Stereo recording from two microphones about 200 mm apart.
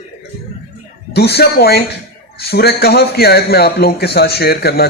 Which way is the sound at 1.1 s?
55° left (ahead or behind).